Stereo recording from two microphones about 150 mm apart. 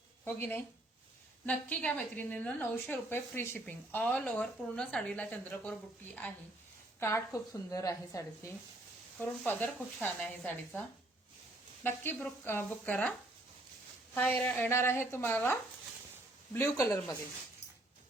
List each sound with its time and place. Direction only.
0.3 s a woman's voice: 15° left (ahead or behind)
7.0 s a woman's voice: 20° left (ahead or behind)
14.4 s a woman's voice: 15° left (ahead or behind)
16.6 s a woman's voice: 20° left (ahead or behind)